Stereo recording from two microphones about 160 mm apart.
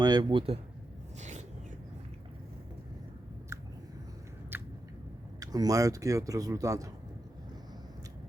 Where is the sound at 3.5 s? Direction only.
20° right (ahead or behind).